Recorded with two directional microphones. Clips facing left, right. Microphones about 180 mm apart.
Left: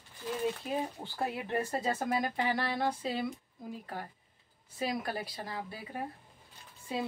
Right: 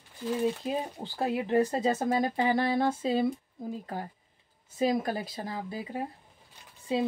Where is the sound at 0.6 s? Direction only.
20° right (ahead or behind).